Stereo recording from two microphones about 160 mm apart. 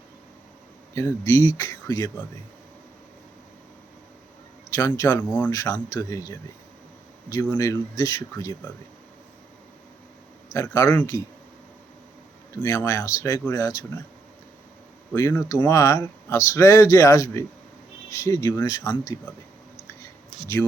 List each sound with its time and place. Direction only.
0.9 s speech: 15° left (ahead or behind)
4.7 s speech: 20° left (ahead or behind)
7.5 s speech: 20° left (ahead or behind)
10.5 s speech: 20° left (ahead or behind)
12.5 s speech: 15° left (ahead or behind)
15.1 s speech: 20° left (ahead or behind)